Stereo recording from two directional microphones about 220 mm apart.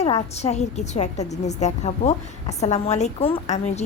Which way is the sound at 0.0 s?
30° left (ahead or behind).